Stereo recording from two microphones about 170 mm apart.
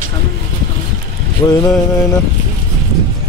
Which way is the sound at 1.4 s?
20° left (ahead or behind).